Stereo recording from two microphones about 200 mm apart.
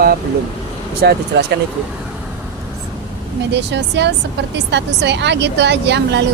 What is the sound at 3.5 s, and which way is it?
A woman's voice, 60° right (ahead or behind).